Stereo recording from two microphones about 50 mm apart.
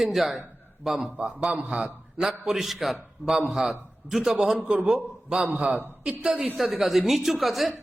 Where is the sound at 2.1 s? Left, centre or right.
Centre.